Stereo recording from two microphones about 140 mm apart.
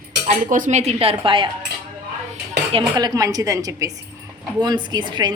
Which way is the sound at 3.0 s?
25° right (ahead or behind).